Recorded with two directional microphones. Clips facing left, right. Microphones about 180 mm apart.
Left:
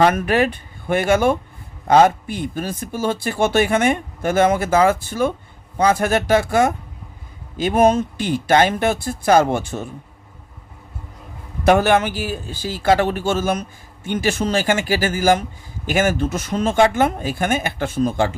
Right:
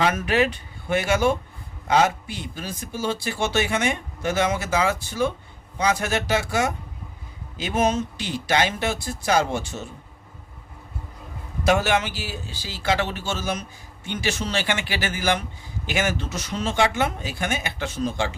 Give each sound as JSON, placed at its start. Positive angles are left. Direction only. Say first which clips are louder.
{"t": 0.0, "sound": "a man's voice", "louder": "left 5 dB", "side_deg": 50}
{"t": 11.6, "sound": "a man's voice", "louder": "left 6 dB", "side_deg": 55}